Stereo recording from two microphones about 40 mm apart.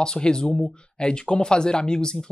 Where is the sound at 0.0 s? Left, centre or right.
Centre.